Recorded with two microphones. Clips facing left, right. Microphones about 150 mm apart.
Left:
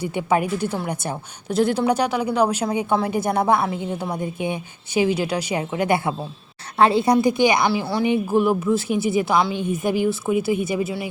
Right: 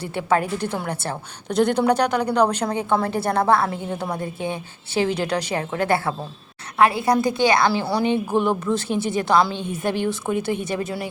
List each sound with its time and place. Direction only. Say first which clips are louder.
0.0 s a woman's voice: left 1 dB; 10° left (ahead or behind)
3.7 s a woman's voice: left 1 dB; 5° left (ahead or behind)
6.7 s a woman's voice: left 2 dB; 25° left (ahead or behind); by 11.1 s 5° left (ahead or behind)